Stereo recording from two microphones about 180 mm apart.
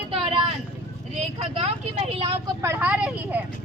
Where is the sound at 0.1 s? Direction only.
35° right (ahead or behind).